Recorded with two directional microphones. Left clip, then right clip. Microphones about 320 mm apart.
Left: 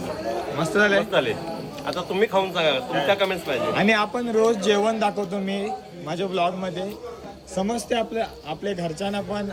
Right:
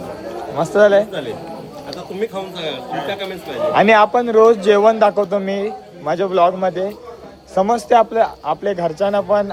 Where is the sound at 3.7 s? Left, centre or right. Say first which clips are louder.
Right 12 dB; right.